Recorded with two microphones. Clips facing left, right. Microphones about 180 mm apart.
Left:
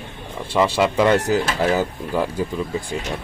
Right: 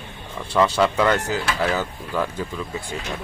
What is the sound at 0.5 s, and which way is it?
Speech, 10° left (ahead or behind).